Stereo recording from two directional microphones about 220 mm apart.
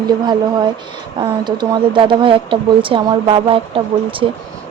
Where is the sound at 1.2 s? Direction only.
20° right (ahead or behind).